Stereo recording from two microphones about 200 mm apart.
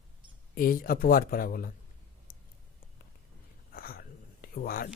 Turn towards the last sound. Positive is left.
turn(degrees=50)  # may be behind; listen again after turning